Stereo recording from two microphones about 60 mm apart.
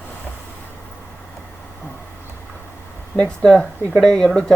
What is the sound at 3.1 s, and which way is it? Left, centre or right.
Speech, centre.